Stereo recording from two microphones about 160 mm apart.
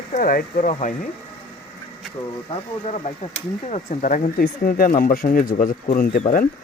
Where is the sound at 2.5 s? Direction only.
40° left (ahead or behind); by 6.2 s 60° left (ahead or behind).